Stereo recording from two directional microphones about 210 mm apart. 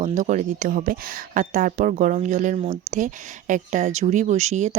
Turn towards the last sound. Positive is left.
turn(degrees=-35)  # may be behind; listen again after turning